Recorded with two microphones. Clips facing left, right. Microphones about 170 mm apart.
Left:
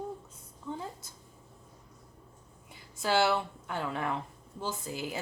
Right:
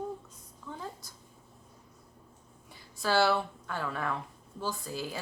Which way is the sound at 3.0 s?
20° left (ahead or behind).